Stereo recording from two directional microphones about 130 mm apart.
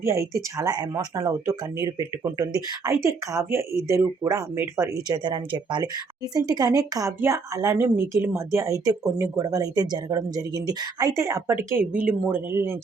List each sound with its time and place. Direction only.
0.0 s speech: 25° right (ahead or behind)
5.1 s speech: 35° right (ahead or behind); by 12.7 s 20° right (ahead or behind)